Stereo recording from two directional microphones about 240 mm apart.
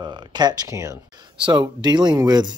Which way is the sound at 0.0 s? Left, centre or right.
Centre.